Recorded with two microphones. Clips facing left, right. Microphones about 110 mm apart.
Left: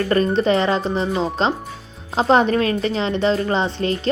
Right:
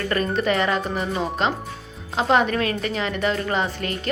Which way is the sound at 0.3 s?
30° left (ahead or behind).